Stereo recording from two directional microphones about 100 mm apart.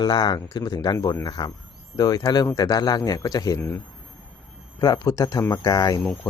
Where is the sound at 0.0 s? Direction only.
45° left (ahead or behind).